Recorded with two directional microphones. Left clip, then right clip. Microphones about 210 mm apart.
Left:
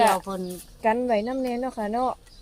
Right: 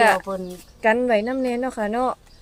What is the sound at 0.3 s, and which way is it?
Speech, centre (ahead or behind).